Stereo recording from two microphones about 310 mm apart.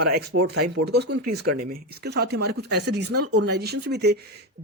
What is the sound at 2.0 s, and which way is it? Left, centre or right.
Speech, right.